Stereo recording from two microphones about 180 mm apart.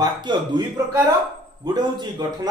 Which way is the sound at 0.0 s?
25° right (ahead or behind).